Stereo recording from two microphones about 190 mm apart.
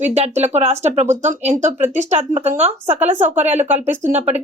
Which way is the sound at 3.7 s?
10° right (ahead or behind).